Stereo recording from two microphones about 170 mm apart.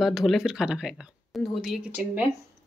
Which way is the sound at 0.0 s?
Centre (ahead or behind).